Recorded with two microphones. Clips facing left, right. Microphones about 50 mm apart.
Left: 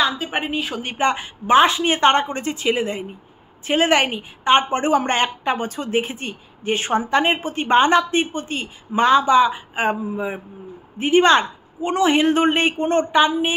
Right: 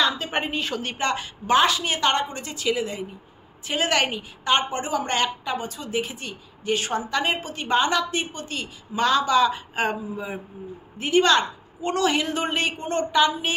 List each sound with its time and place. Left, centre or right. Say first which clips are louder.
0.0 s a woman's voice: left 2 dB; centre; by 13.5 s left